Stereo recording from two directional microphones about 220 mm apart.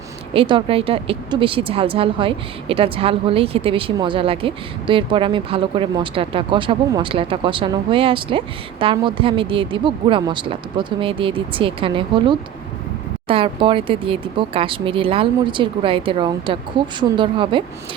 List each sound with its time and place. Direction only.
0.3 s speech: 25° right (ahead or behind)